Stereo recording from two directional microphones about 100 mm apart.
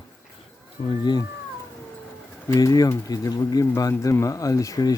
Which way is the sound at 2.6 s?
35° left (ahead or behind).